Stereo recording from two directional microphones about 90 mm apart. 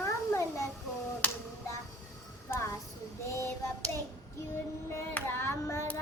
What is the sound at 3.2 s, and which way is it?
Child singing, 30° left (ahead or behind).